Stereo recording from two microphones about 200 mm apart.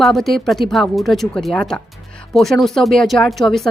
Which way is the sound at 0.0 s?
Centre (ahead or behind).